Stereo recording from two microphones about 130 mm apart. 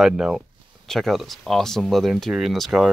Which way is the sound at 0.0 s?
5° right (ahead or behind).